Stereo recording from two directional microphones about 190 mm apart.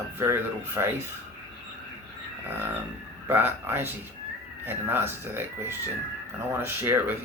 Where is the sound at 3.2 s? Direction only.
10° right (ahead or behind).